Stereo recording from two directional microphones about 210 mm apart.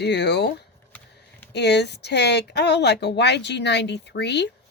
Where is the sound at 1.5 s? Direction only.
55° left (ahead or behind).